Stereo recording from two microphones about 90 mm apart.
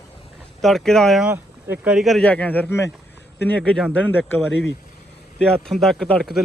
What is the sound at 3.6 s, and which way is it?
A man's voice, 5° left (ahead or behind).